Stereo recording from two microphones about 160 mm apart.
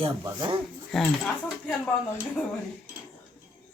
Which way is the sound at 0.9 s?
Centre (ahead or behind).